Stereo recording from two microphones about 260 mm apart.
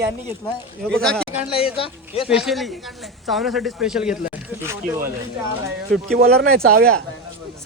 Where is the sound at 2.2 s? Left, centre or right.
Centre.